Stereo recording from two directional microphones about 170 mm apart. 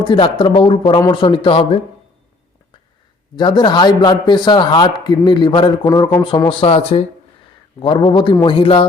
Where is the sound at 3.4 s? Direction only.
25° left (ahead or behind).